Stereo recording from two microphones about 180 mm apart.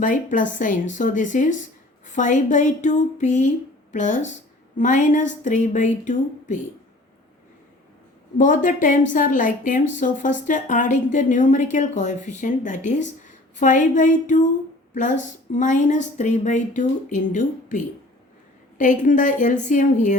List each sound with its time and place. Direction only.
0.0 s a woman's voice: 45° left (ahead or behind)
8.4 s a woman's voice: 45° left (ahead or behind)